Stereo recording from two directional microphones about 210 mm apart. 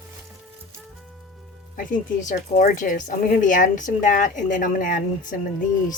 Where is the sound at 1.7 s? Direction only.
40° left (ahead or behind).